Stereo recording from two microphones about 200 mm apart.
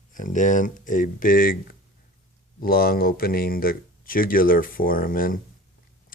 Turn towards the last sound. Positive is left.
turn(degrees=45)  # may be behind; listen again after turning